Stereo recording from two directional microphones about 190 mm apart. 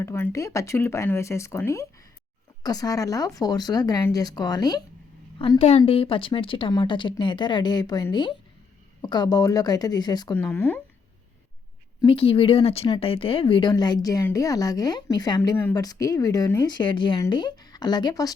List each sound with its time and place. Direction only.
0.0 s speech: 15° left (ahead or behind)
5.4 s speech: 30° left (ahead or behind); by 10.8 s 10° left (ahead or behind)
12.0 s speech: 30° left (ahead or behind)